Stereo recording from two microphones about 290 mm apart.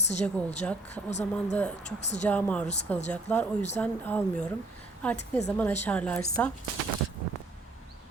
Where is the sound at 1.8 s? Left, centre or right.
Left.